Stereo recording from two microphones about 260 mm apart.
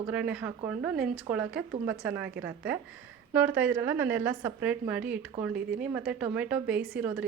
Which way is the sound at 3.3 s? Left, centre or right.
Centre.